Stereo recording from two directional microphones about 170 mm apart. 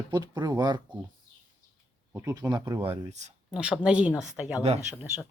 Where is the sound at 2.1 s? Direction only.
15° right (ahead or behind); by 3.3 s 40° right (ahead or behind).